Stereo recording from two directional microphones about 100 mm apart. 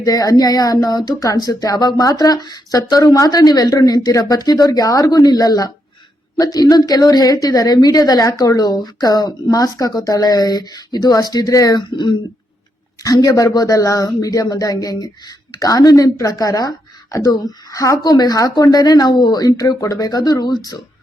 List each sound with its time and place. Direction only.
0.0 s a woman's voice: 35° left (ahead or behind)